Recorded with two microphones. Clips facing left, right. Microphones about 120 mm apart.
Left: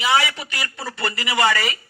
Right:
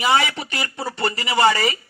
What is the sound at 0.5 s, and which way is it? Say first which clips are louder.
Speech: right 6 dB; 20° right (ahead or behind).